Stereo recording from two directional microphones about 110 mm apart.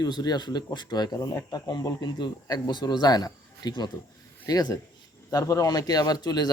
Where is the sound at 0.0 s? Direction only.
35° left (ahead or behind).